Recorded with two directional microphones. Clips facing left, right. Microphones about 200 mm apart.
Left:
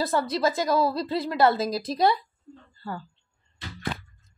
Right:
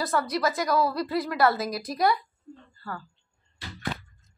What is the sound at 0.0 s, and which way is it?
A woman's voice, 30° left (ahead or behind).